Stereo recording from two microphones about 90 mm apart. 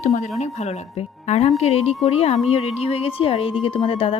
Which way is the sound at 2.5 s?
90° left.